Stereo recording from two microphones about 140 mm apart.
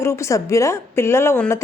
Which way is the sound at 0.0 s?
20° left (ahead or behind).